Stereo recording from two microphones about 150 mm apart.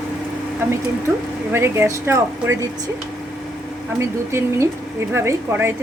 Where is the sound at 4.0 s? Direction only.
20° right (ahead or behind).